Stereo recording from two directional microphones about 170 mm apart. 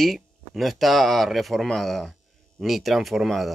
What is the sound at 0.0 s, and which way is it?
Speech, centre (ahead or behind).